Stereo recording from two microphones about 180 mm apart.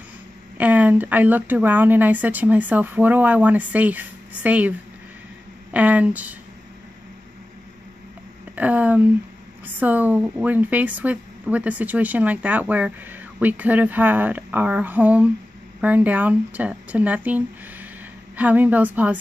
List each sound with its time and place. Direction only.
0.6 s speech: 10° right (ahead or behind)
8.5 s speech: 10° right (ahead or behind)